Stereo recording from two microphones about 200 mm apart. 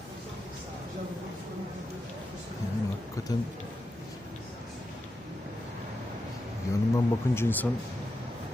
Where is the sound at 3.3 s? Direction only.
20° left (ahead or behind).